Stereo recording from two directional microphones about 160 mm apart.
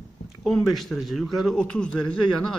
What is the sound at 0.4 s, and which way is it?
A man's voice, centre (ahead or behind).